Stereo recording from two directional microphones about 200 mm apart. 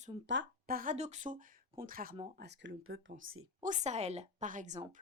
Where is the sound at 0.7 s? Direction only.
40° right (ahead or behind).